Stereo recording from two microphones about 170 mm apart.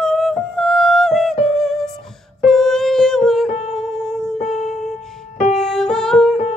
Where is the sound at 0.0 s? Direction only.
Centre (ahead or behind).